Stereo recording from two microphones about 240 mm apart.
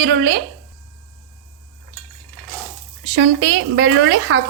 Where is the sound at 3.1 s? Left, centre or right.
Right.